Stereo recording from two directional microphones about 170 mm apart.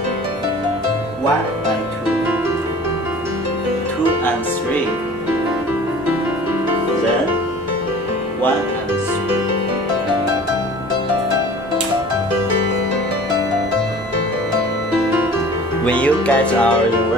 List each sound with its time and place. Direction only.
15.8 s music: 5° left (ahead or behind)